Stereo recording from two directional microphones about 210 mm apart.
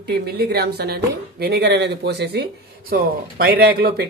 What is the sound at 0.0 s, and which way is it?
Speech, 50° right (ahead or behind).